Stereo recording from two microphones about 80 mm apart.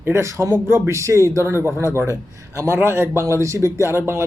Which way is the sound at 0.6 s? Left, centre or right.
Right.